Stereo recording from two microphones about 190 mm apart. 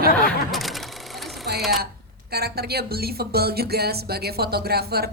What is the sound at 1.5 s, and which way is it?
Speech, 55° right (ahead or behind).